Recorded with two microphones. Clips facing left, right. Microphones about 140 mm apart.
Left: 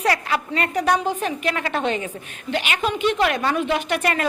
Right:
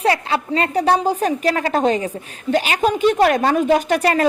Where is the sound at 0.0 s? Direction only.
30° right (ahead or behind).